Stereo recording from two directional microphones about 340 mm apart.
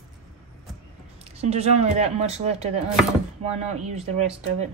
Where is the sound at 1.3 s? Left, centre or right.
Centre.